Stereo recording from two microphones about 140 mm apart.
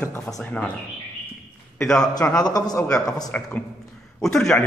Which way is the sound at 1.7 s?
5° left (ahead or behind).